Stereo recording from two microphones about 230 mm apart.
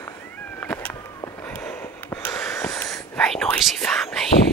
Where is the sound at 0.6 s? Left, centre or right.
Centre.